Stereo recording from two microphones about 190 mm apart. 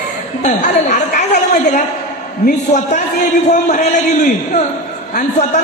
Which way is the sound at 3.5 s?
40° left (ahead or behind).